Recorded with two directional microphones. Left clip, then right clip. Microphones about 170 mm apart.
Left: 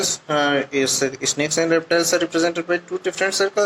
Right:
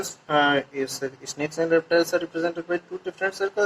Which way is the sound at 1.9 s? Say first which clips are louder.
Left 3 dB; 45° left (ahead or behind).